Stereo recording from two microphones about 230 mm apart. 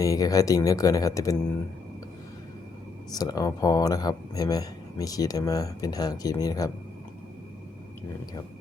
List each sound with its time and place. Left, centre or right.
0.0 s speech: centre
3.1 s speech: centre